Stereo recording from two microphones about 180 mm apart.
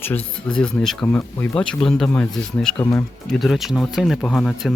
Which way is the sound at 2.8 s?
20° left (ahead or behind).